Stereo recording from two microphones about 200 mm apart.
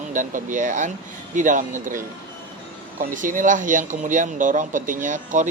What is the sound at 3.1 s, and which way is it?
Speech, 40° right (ahead or behind).